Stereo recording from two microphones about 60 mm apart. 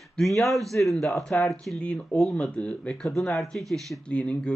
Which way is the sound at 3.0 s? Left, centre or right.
Centre.